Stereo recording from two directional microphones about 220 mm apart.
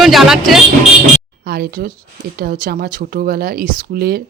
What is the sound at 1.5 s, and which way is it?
Speech, 45° right (ahead or behind).